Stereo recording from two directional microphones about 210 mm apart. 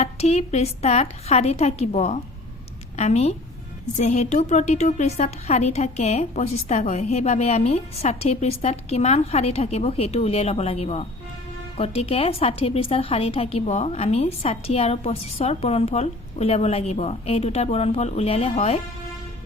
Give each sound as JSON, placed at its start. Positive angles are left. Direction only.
{"t": 0.0, "sound": "a woman's voice", "side_deg": 30}